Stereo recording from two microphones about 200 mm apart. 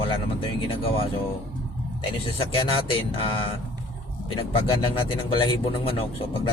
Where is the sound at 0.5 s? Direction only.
25° left (ahead or behind).